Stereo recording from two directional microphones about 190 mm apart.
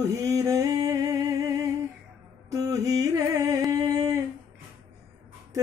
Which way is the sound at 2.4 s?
20° right (ahead or behind).